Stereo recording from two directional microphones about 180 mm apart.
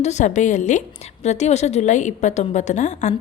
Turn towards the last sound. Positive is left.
turn(degrees=40)  # may be behind; listen again after turning